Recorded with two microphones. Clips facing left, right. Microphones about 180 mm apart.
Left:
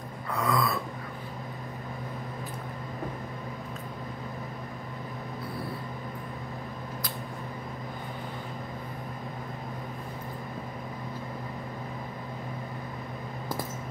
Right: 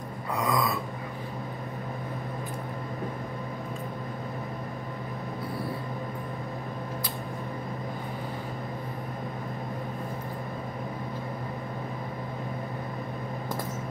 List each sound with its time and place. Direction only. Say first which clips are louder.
0.4 s gasp: even; 15° right (ahead or behind)